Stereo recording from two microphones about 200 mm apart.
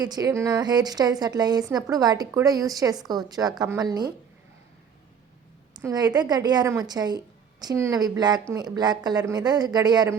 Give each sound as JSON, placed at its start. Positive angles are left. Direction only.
{"t": 0.0, "sound": "a woman's voice", "side_deg": -20}
{"t": 5.7, "sound": "a woman's voice", "side_deg": -20}